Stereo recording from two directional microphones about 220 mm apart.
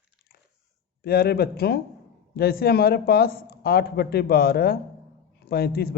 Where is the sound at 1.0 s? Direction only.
45° left (ahead or behind).